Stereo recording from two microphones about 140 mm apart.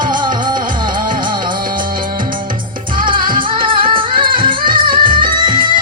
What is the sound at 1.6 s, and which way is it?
Music, 90° right.